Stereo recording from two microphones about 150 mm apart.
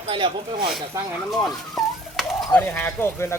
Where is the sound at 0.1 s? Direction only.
35° right (ahead or behind).